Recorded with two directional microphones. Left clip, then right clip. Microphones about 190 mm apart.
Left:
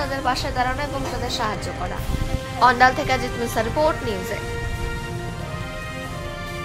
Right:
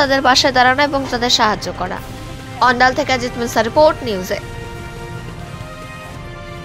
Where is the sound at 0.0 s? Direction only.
35° right (ahead or behind).